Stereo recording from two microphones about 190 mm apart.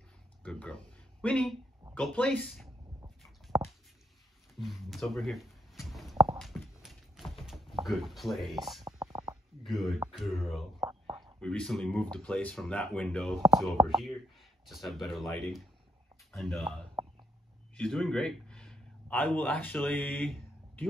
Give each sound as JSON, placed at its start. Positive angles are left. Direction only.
{"t": 0.4, "sound": "speech", "side_deg": 5}
{"t": 3.2, "sound": "a sound", "side_deg": 0}
{"t": 7.8, "sound": "speech", "side_deg": 0}
{"t": 8.8, "sound": "stomach rumble", "side_deg": -20}
{"t": 9.7, "sound": "speech", "side_deg": 0}
{"t": 10.8, "sound": "whispering", "side_deg": -25}
{"t": 11.4, "sound": "speech", "side_deg": 5}
{"t": 17.7, "sound": "a man's voice", "side_deg": 0}